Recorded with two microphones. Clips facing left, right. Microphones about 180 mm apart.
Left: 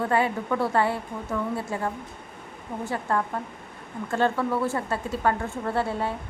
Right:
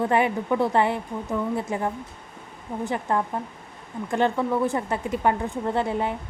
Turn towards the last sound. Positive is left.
turn(degrees=-20)  # may be behind; listen again after turning